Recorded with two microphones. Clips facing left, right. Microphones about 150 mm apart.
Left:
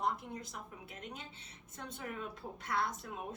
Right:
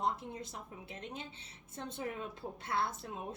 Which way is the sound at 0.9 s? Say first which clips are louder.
Right 3 dB; 25° right (ahead or behind).